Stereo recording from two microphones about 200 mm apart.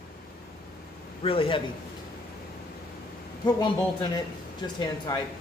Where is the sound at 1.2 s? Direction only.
25° left (ahead or behind).